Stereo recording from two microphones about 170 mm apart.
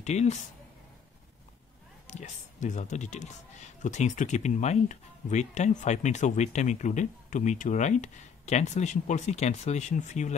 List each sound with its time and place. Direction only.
0.0 s speech: 40° left (ahead or behind)
2.0 s speech: 45° left (ahead or behind)